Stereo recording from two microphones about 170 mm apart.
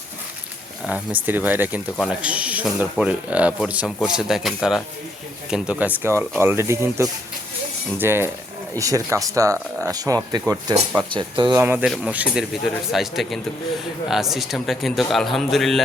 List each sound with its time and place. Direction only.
0.9 s speech: 10° right (ahead or behind); by 11.6 s 25° right (ahead or behind)
11.6 s a man's voice: 10° right (ahead or behind)